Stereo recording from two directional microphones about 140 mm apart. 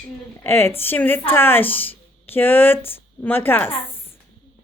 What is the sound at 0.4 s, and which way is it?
Speech, 15° left (ahead or behind).